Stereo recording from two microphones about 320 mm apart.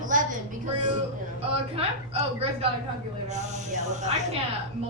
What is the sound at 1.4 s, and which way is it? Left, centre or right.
A man's voice, centre.